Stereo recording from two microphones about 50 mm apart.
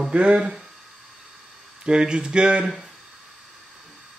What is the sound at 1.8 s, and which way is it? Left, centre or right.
Speech, centre.